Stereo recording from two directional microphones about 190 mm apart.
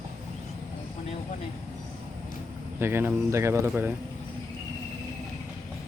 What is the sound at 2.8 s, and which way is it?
Speech, 10° right (ahead or behind).